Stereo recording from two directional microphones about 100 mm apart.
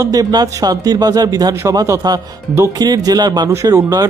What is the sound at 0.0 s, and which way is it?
Speech, 35° right (ahead or behind).